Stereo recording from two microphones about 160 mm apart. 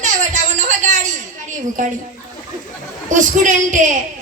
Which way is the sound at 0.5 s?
50° right (ahead or behind).